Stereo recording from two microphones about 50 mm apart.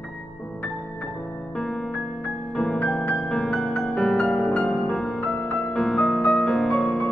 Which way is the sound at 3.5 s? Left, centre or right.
Centre.